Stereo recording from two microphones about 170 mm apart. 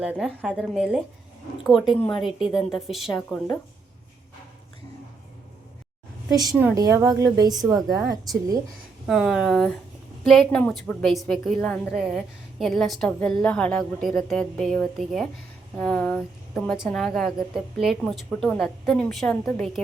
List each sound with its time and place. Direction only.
0.0 s a woman's voice: 5° right (ahead or behind)
6.3 s a woman's voice: 20° right (ahead or behind)
9.0 s a woman's voice: centre (ahead or behind)